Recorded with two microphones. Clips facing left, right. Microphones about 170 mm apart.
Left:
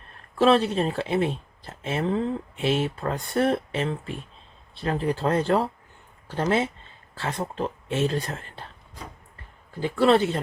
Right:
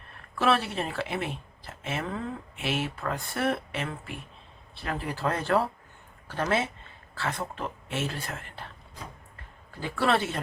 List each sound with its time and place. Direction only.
0.3 s speech: 25° left (ahead or behind)
9.8 s speech: 25° left (ahead or behind)